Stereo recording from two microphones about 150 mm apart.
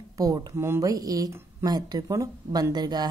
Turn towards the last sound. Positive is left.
turn(degrees=-30)  # may be behind; listen again after turning